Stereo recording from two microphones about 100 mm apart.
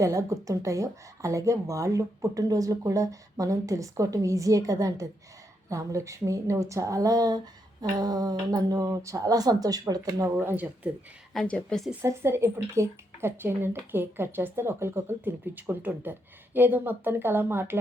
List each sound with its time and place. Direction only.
0.0 s a woman's voice: 30° right (ahead or behind)
10.3 s speech: 20° right (ahead or behind)
11.3 s a woman's voice: 10° left (ahead or behind)
12.0 s speech: 25° right (ahead or behind)